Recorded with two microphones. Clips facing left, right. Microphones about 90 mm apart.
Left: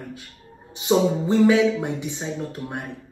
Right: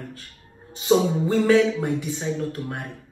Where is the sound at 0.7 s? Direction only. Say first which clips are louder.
Even; 15° left (ahead or behind).